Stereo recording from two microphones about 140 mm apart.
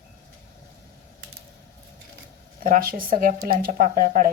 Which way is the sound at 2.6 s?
85° right.